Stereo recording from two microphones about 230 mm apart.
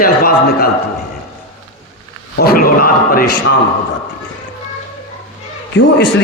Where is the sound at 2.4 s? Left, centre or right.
Left.